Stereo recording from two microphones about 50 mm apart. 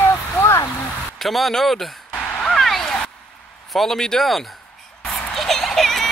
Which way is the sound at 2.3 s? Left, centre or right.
Centre.